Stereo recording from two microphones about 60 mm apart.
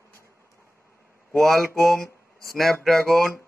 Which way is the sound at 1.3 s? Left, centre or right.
Centre.